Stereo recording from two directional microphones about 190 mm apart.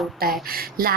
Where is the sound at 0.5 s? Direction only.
50° right (ahead or behind).